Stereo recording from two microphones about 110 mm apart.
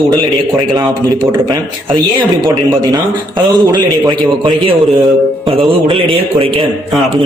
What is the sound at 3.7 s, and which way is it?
Speech, 40° right (ahead or behind).